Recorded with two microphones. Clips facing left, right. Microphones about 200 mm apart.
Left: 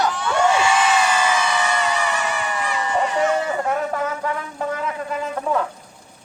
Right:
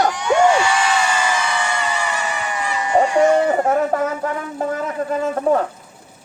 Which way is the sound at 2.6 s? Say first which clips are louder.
Right 1 dB; centre (ahead or behind).